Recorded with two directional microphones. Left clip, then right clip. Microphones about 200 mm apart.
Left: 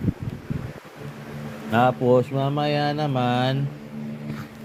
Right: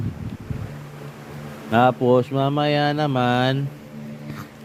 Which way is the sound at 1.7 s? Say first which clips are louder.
Right 2 dB; 35° right (ahead or behind).